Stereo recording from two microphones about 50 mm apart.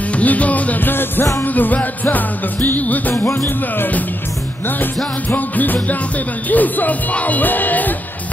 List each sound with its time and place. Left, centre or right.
0.1 s music: left
5.3 s music: left